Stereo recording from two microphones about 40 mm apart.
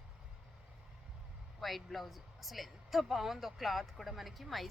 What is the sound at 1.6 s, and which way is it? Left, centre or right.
A woman's voice, centre.